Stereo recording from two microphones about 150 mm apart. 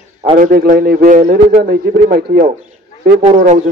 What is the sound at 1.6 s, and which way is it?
A man's voice, 80° right.